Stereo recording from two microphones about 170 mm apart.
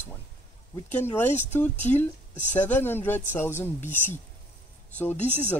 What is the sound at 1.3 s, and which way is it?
Speech, 45° left (ahead or behind).